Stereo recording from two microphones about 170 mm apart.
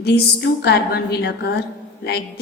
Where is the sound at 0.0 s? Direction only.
75° left (ahead or behind).